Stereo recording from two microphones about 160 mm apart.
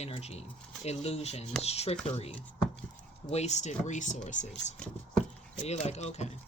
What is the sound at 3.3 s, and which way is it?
Speech, 45° left (ahead or behind).